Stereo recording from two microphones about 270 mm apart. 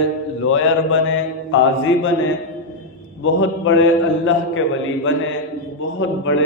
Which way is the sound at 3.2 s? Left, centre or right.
Left.